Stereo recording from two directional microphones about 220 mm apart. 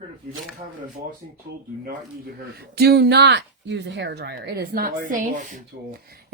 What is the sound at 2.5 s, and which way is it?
Speech, 45° right (ahead or behind).